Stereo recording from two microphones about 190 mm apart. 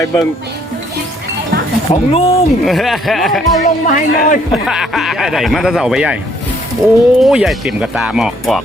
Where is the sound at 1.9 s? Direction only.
30° left (ahead or behind).